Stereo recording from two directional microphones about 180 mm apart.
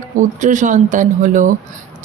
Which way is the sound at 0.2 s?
45° right (ahead or behind).